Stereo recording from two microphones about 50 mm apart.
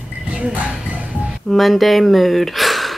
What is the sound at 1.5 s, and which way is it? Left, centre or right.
Speech, centre.